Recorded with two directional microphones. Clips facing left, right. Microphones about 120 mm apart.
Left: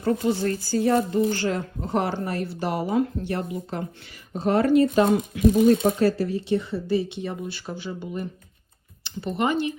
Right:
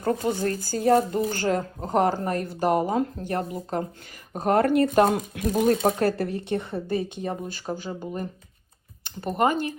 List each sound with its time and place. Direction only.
0.0 s speech: 50° right (ahead or behind)
4.4 s speech: 50° right (ahead or behind)